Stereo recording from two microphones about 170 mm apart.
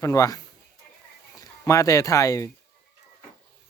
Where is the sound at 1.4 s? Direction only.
20° left (ahead or behind).